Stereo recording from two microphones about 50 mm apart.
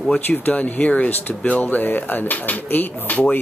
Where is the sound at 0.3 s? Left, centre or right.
Left.